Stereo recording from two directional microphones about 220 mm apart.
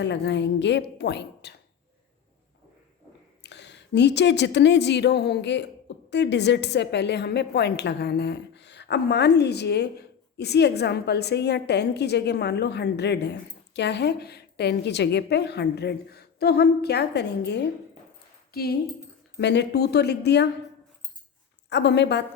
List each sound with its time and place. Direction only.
0.0 s speech: 50° left (ahead or behind)
3.4 s speech: 50° left (ahead or behind)
21.7 s speech: 50° left (ahead or behind)